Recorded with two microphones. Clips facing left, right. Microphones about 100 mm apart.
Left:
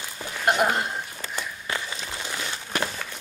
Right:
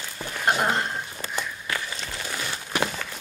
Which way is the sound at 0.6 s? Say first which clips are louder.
Left 1 dB; 5° left (ahead or behind).